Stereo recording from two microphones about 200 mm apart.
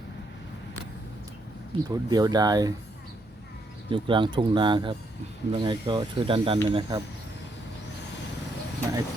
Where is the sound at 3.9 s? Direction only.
25° right (ahead or behind).